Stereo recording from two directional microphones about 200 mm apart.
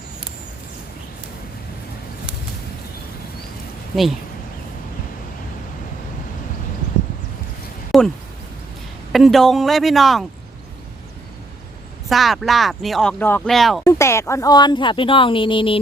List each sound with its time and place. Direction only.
7.9 s a sound: centre (ahead or behind)
9.1 s speech: centre (ahead or behind)
12.0 s speech: centre (ahead or behind)
13.8 s speech: 15° left (ahead or behind)